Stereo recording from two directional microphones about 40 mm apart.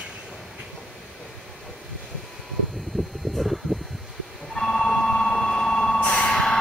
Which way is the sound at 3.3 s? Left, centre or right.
Centre.